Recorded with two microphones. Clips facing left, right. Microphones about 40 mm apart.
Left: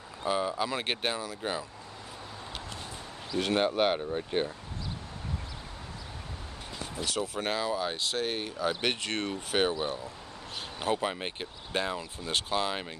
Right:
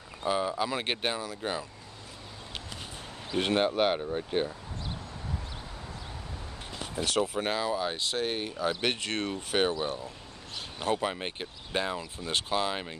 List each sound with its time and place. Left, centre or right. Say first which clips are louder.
0.2 s speech: right 1 dB; centre
3.3 s speech: right 1 dB; right
3.5 s speech: even; centre
7.3 s speech: right 1 dB; centre
10.8 s speech: right 1 dB; centre